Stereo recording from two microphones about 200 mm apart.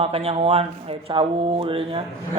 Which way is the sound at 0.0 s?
30° right (ahead or behind).